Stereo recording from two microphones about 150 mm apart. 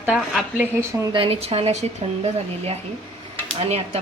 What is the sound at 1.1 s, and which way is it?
A woman's voice, 35° right (ahead or behind).